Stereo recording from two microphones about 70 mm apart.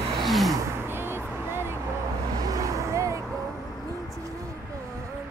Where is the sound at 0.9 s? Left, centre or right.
Right.